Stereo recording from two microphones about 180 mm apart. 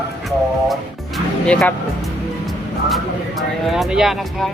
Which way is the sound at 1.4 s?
5° left (ahead or behind).